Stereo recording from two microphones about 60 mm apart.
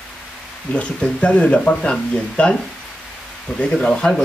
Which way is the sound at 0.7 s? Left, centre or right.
Centre.